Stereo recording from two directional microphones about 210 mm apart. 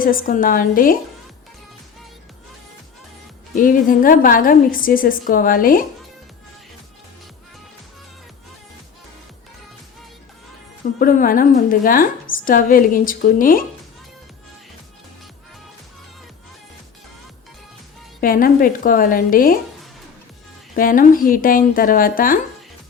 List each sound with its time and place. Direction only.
0.0 s a woman's voice: 40° left (ahead or behind)
3.5 s a woman's voice: 40° left (ahead or behind)
11.0 s a woman's voice: 40° left (ahead or behind)
18.2 s a woman's voice: 45° left (ahead or behind)
20.7 s a woman's voice: 40° left (ahead or behind)